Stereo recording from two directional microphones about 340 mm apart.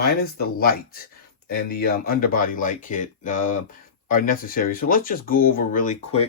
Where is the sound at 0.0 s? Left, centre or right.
Left.